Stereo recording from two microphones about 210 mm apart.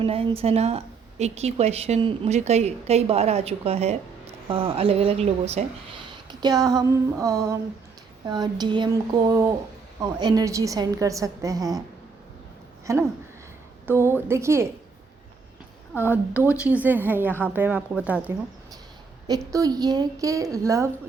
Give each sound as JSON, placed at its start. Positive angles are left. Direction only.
{"t": 0.0, "sound": "a woman's voice", "side_deg": -30}
{"t": 12.9, "sound": "a woman's voice", "side_deg": -15}
{"t": 15.9, "sound": "a woman's voice", "side_deg": 10}
{"t": 16.3, "sound": "a woman's voice", "side_deg": -5}